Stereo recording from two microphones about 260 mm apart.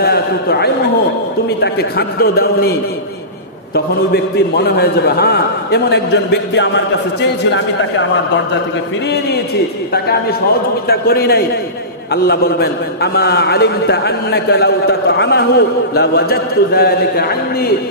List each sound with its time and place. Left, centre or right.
0.0 s a man's voice: left
3.7 s a man's voice: left
10.9 s a man's voice: left